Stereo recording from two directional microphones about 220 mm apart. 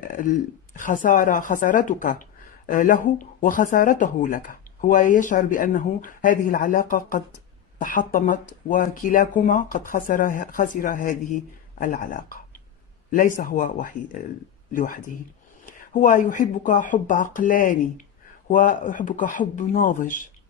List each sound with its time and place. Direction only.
0.1 s a woman's voice: 35° left (ahead or behind)